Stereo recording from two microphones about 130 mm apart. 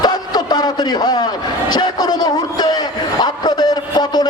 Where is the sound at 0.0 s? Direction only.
30° left (ahead or behind).